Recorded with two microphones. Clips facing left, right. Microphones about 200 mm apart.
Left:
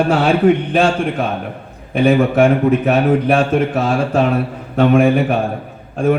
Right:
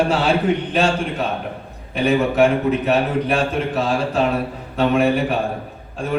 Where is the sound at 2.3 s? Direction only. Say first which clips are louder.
Left 4 dB; 50° left (ahead or behind).